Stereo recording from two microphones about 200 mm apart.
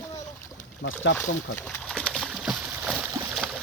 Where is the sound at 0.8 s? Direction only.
65° left (ahead or behind).